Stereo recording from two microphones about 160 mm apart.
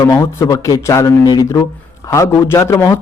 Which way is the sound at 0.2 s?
20° left (ahead or behind).